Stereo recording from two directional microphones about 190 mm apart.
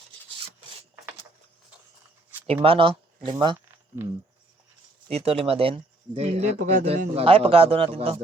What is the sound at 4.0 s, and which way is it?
Speech, 10° right (ahead or behind).